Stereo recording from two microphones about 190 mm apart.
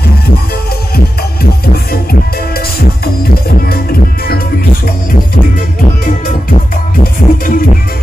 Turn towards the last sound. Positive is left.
turn(degrees=50)  # may be behind; listen again after turning